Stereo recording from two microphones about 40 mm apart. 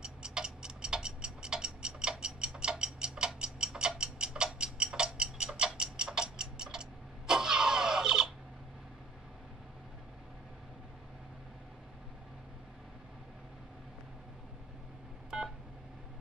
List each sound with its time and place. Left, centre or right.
0.0 s tick-tock: right